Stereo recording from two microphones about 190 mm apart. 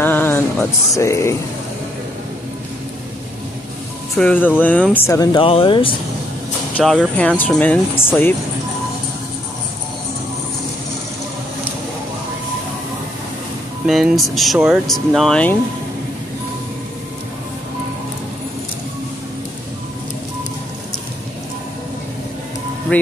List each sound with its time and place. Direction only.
0.0 s a sound: 10° left (ahead or behind)
4.2 s speech: 10° left (ahead or behind); by 5.9 s 25° left (ahead or behind)
6.8 s speech: centre (ahead or behind)
13.8 s speech: centre (ahead or behind)